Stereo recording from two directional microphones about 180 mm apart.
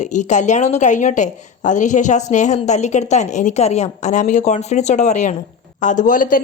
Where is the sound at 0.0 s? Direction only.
40° left (ahead or behind).